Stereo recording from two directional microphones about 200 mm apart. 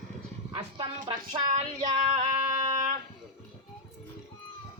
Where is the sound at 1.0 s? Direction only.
25° right (ahead or behind).